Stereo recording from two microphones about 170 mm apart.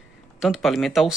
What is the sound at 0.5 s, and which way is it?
Speech, centre (ahead or behind).